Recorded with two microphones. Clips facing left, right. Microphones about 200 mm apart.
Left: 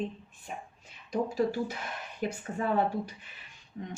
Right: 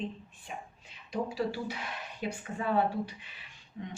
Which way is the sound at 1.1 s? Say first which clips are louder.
Left 4 dB; 45° left (ahead or behind).